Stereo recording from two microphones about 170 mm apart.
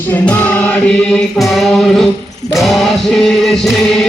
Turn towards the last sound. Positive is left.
turn(degrees=0)  # may be behind; listen again after turning